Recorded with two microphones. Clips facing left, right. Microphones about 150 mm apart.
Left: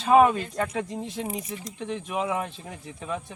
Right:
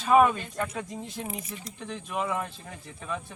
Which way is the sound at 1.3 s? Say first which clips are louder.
Left 5 dB; 20° left (ahead or behind).